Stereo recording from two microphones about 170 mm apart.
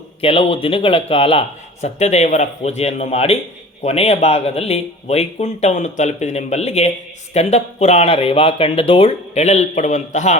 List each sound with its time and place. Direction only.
0.2 s a man's voice: 35° left (ahead or behind)